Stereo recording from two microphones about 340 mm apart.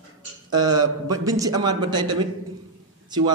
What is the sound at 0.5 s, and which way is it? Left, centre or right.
A man's voice, centre.